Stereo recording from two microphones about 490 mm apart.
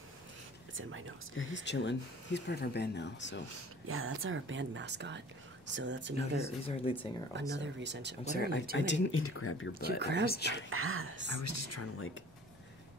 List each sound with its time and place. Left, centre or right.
0.7 s speech: right
1.3 s speech: left
3.8 s speech: right
6.3 s speech: centre
7.5 s speech: right
8.3 s speech: centre
9.8 s speech: centre
10.2 s speech: centre
10.7 s speech: right
11.3 s speech: left